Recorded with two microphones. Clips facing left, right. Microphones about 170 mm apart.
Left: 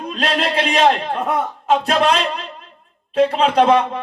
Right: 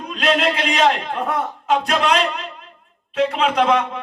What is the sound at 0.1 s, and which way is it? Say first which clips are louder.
A man's voice: right 2 dB; 35° left (ahead or behind).